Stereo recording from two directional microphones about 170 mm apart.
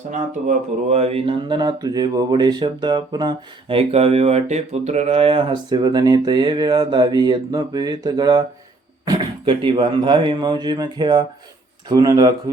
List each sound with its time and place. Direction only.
0.1 s speech: 40° right (ahead or behind); by 12.3 s 20° right (ahead or behind)